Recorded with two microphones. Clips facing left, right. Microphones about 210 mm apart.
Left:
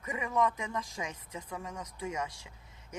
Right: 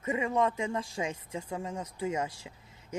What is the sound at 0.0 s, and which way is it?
Speech, 25° right (ahead or behind).